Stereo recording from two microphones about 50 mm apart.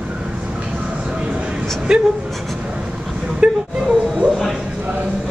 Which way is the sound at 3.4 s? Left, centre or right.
Centre.